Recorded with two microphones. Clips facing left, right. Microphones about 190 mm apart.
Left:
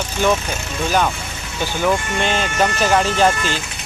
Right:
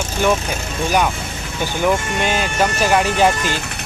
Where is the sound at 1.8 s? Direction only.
10° right (ahead or behind).